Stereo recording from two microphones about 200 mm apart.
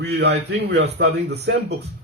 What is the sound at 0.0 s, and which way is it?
A man's voice, 55° right (ahead or behind).